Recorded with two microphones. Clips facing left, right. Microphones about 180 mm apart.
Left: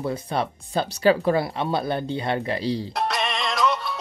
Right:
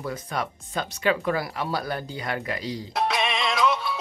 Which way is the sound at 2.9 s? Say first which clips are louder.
Even; centre (ahead or behind).